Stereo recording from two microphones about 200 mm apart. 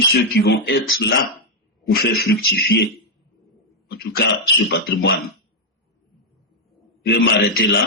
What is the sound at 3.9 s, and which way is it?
A man's voice, 55° left (ahead or behind).